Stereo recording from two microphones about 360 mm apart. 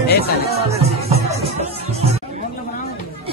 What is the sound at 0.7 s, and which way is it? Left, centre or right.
Music, centre.